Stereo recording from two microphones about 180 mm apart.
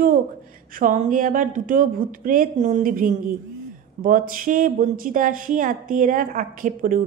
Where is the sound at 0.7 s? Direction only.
45° right (ahead or behind).